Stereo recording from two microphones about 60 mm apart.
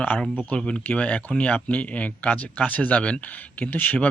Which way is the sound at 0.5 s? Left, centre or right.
Centre.